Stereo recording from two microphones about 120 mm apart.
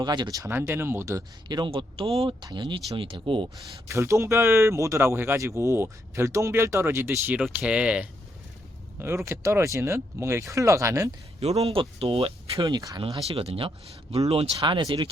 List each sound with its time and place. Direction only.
0.0 s speech: 35° right (ahead or behind)
1.5 s speech: 40° right (ahead or behind)
2.4 s speech: 40° right (ahead or behind)
3.8 s speech: 25° right (ahead or behind)
7.4 s speech: 5° right (ahead or behind)
9.0 s speech: 20° right (ahead or behind)
11.3 s speech: 55° right (ahead or behind)
12.5 s speech: 35° right (ahead or behind)
13.2 s speech: 55° right (ahead or behind)